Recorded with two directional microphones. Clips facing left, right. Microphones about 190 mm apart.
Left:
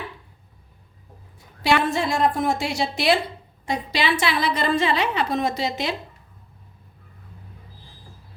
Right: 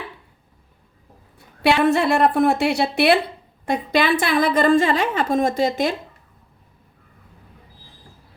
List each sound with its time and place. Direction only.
1.8 s a woman's voice: 65° right (ahead or behind)